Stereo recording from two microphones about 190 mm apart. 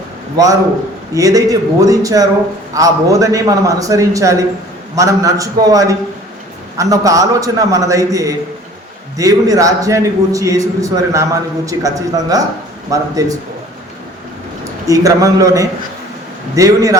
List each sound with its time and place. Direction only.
1.1 s a man's voice: 15° right (ahead or behind)
14.8 s a man's voice: 15° right (ahead or behind)